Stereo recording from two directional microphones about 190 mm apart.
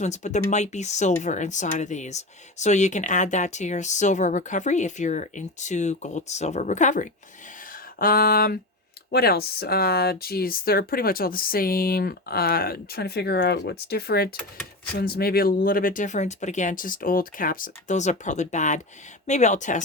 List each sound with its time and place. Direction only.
0.0 s speech: 40° left (ahead or behind)